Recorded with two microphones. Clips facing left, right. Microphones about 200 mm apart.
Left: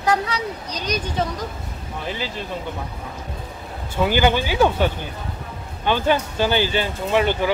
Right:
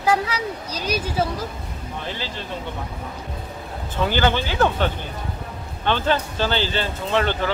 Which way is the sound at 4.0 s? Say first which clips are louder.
Left 2 dB; 10° left (ahead or behind).